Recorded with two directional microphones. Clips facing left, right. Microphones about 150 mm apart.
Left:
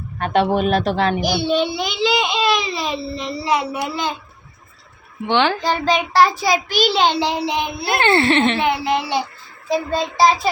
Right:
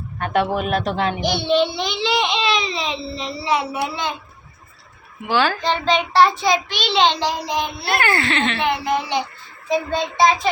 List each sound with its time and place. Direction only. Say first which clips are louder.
0.5 s speech: left 3 dB; 30° left (ahead or behind)
1.3 s speech: even; 5° left (ahead or behind)
5.2 s speech: left 2 dB; 20° left (ahead or behind)
5.6 s a child's voice: left 1 dB; 5° left (ahead or behind)
7.9 s speech: left 5 dB; 25° left (ahead or behind)
8.5 s a child's voice: left 2 dB; 10° left (ahead or behind)